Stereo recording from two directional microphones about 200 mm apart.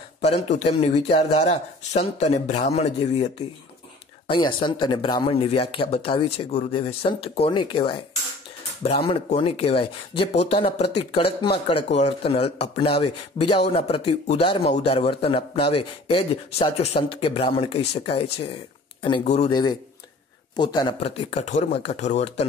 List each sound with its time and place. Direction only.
0.2 s a man's voice: 35° left (ahead or behind)